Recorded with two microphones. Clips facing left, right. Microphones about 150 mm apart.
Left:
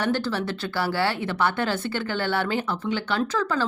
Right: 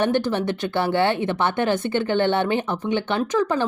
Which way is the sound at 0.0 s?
20° right (ahead or behind).